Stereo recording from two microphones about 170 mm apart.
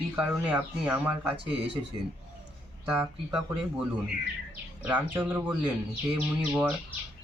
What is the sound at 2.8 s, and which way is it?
Speech, 5° right (ahead or behind).